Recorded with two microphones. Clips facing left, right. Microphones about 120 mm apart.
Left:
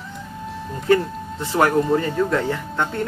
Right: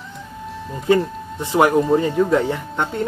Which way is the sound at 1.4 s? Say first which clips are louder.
Right 2 dB; 20° right (ahead or behind).